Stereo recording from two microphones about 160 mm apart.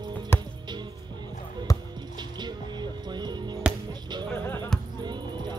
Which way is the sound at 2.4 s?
25° right (ahead or behind).